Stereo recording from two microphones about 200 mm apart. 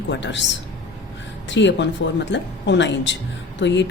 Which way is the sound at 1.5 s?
65° left (ahead or behind).